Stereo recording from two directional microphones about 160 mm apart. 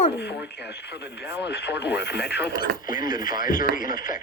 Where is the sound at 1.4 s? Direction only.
90° left.